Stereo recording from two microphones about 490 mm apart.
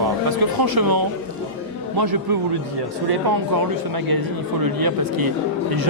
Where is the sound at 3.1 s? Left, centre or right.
Right.